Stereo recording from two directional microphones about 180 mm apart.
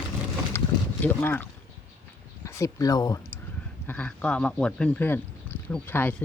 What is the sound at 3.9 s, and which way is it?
Speech, 10° left (ahead or behind).